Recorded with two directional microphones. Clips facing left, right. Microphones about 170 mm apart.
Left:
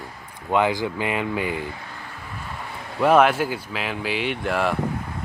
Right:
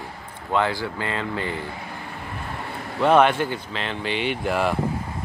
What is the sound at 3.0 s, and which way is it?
Speech, 5° left (ahead or behind).